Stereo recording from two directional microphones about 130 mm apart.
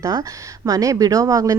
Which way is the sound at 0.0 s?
30° right (ahead or behind).